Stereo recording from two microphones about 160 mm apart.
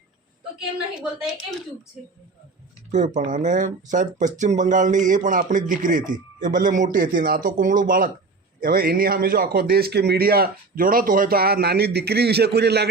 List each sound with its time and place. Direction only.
0.9 s speech: 5° right (ahead or behind)
3.2 s a man's voice: 50° right (ahead or behind); by 12.9 s 90° right